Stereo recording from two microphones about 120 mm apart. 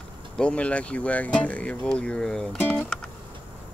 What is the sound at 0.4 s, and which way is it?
Speech, 10° left (ahead or behind).